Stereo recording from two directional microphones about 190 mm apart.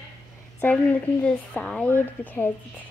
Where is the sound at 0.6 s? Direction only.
10° left (ahead or behind).